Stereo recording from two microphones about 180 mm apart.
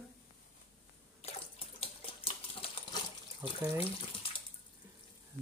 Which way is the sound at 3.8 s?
30° left (ahead or behind).